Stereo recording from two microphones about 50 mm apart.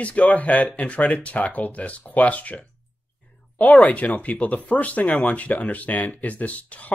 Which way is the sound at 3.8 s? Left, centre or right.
Left.